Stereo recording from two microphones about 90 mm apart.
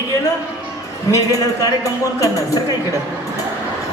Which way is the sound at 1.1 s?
40° left (ahead or behind).